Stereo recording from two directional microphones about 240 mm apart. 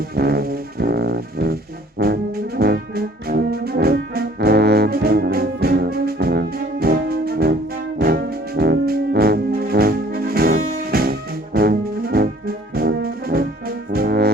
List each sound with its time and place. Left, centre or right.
0.2 s music: right
2.0 s brass instrument: right
7.9 s music: right